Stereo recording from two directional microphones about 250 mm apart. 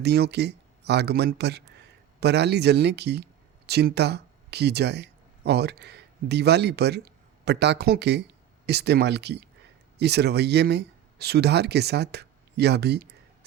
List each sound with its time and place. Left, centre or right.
0.0 s speech: right